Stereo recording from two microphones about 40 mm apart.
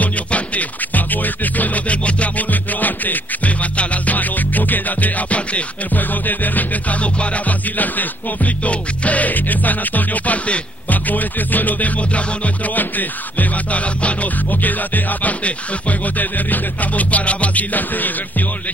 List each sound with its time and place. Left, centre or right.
0.0 s music: left
12.0 s music: left
12.7 s music: left
14.5 s music: left